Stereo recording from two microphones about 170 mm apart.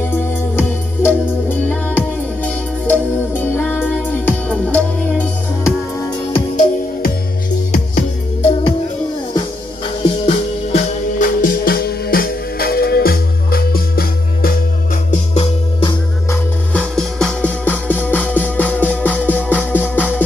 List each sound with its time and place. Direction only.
0.1 s music: 10° left (ahead or behind)
6.5 s music: 45° left (ahead or behind)
10.0 s music: 35° left (ahead or behind)
11.2 s music: 60° left (ahead or behind)
15.0 s music: 35° left (ahead or behind)
16.9 s music: 5° left (ahead or behind)